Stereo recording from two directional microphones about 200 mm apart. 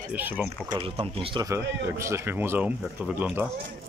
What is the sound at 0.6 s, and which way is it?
Speech, 25° right (ahead or behind).